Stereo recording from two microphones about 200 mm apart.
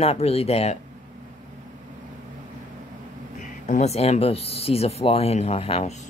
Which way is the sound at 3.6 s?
35° left (ahead or behind).